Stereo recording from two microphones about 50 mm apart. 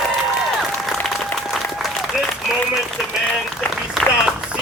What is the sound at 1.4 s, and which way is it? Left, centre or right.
Applause, centre.